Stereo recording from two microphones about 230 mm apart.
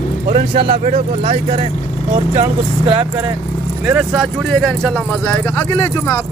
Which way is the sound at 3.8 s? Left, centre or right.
Centre.